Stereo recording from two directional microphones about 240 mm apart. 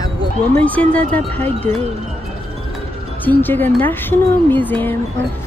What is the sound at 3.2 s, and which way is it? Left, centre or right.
A woman's voice, centre.